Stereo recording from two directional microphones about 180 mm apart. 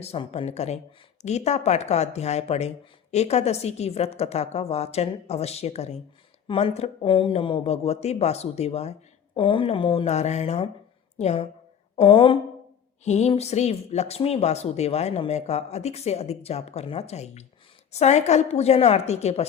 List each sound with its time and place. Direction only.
0.0 s speech: 35° left (ahead or behind)